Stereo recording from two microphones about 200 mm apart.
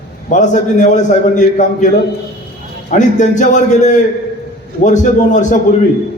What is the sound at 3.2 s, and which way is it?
A man's voice, 35° left (ahead or behind).